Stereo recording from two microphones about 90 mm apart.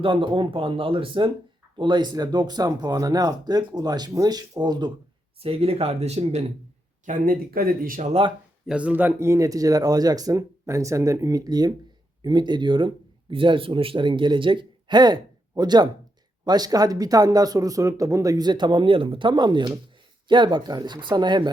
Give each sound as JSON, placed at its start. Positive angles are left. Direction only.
{"t": 0.0, "sound": "speech", "side_deg": -75}
{"t": 1.8, "sound": "speech", "side_deg": -55}
{"t": 5.4, "sound": "speech", "side_deg": -90}
{"t": 8.2, "sound": "speech", "side_deg": -90}
{"t": 8.6, "sound": "speech", "side_deg": -15}